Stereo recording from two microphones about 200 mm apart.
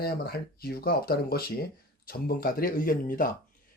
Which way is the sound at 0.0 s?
50° left (ahead or behind).